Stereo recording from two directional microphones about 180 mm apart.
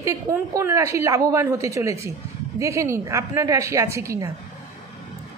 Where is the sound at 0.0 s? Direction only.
15° right (ahead or behind).